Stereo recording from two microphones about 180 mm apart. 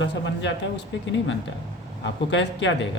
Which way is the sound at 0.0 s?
90° left.